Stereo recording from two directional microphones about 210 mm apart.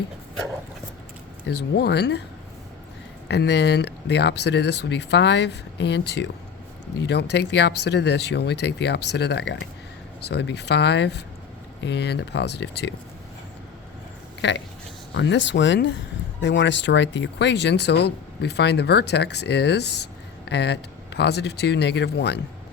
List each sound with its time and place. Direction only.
1.5 s speech: 50° left (ahead or behind)
3.2 s speech: 55° left (ahead or behind)
14.4 s speech: 55° left (ahead or behind)